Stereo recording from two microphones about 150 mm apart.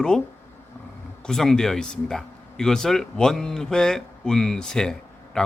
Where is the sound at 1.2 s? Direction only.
5° left (ahead or behind).